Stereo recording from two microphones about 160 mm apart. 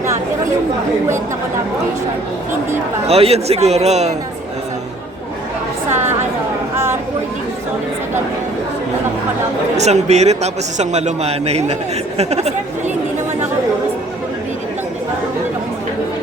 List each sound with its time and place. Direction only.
3.1 s a man's voice: 40° right (ahead or behind)
9.7 s a man's voice: 45° right (ahead or behind)